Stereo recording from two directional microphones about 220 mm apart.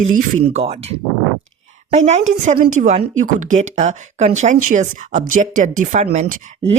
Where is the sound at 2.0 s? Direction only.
30° right (ahead or behind).